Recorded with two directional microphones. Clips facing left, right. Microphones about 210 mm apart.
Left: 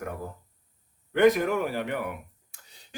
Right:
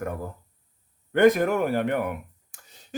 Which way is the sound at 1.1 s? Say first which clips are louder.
Right 2 dB; 50° right (ahead or behind).